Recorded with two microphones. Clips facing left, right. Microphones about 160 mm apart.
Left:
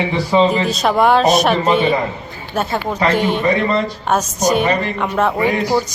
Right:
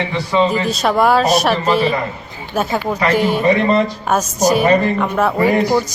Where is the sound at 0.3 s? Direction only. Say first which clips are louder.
Left 1 dB; 25° left (ahead or behind).